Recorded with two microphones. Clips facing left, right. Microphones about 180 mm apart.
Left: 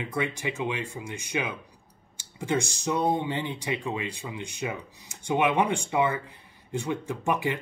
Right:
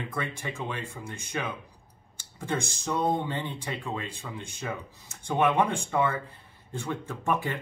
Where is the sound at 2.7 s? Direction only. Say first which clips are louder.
Left 2 dB; 15° left (ahead or behind).